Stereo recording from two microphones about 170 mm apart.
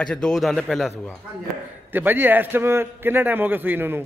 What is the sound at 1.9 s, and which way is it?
A man's voice, 10° right (ahead or behind).